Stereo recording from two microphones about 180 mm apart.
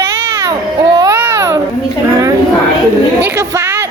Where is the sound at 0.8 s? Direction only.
20° right (ahead or behind).